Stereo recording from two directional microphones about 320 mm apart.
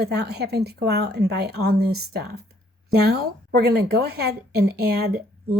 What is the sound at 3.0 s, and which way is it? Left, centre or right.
A woman's voice, right.